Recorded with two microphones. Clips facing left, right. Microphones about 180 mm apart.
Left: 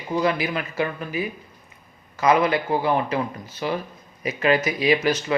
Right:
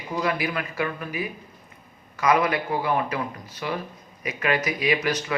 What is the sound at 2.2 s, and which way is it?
Speech, 25° left (ahead or behind).